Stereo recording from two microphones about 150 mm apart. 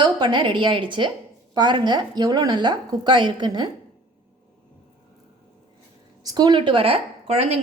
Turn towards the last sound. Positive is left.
turn(degrees=-45)  # may be behind; listen again after turning